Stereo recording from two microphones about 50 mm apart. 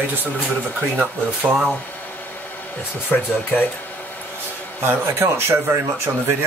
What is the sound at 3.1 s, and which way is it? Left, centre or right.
Speech, left.